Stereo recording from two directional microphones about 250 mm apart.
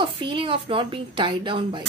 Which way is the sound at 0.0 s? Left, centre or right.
Centre.